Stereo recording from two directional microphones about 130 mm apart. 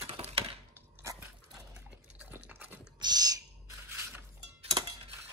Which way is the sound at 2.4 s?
10° right (ahead or behind).